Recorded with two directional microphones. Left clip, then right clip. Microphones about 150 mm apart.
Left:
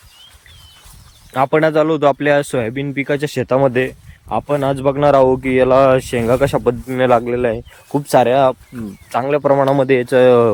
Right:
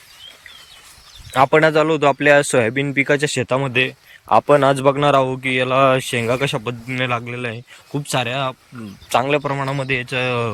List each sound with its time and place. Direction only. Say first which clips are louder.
1.3 s speech: right 1 dB; 20° left (ahead or behind)
4.3 s speech: right 4 dB; 10° left (ahead or behind); by 10.5 s 40° left (ahead or behind)